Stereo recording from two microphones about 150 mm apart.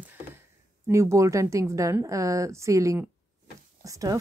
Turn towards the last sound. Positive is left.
turn(degrees=-25)  # may be behind; listen again after turning